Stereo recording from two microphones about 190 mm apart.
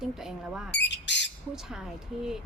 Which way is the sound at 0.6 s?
65° left (ahead or behind).